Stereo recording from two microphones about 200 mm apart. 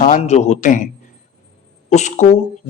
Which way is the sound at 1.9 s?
35° left (ahead or behind).